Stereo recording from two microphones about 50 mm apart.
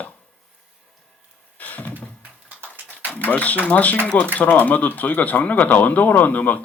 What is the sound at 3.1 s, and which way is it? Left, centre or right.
Speech, left.